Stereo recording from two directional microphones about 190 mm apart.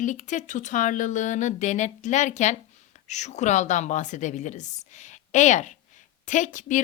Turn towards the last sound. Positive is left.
turn(degrees=40)  # may be behind; listen again after turning